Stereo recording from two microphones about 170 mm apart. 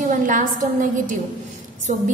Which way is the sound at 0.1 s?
50° right (ahead or behind).